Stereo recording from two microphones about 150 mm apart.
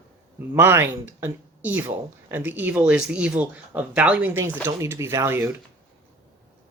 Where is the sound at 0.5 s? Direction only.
15° right (ahead or behind).